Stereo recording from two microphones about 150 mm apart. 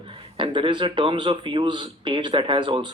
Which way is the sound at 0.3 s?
35° right (ahead or behind).